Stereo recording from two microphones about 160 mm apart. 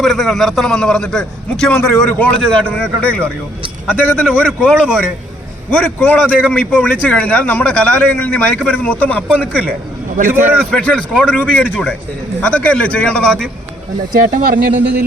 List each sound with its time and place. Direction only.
0.0 s a man's voice: centre (ahead or behind)
10.2 s speech: 60° right (ahead or behind)
10.6 s a man's voice: 5° left (ahead or behind)
14.3 s speech: 60° right (ahead or behind)